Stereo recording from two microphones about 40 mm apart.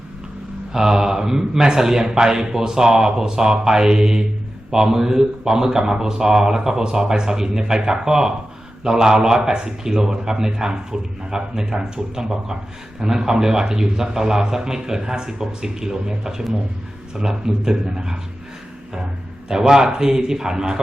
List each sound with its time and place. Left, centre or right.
0.7 s a man's voice: centre
19.5 s a man's voice: centre